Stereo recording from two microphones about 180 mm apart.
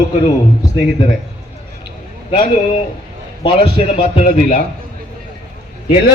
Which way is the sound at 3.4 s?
30° left (ahead or behind).